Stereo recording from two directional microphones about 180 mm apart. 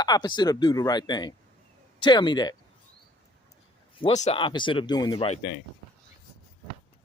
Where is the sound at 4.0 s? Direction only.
35° left (ahead or behind).